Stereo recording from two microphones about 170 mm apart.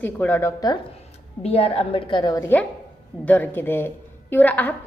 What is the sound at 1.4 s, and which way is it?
A woman's voice, 35° left (ahead or behind).